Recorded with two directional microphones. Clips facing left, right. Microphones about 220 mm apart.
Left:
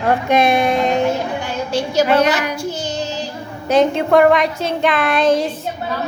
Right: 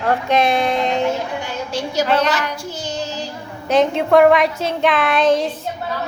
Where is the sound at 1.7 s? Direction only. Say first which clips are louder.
Left 5 dB; 30° left (ahead or behind).